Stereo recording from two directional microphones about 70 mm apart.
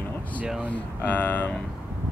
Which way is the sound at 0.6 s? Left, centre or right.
Left.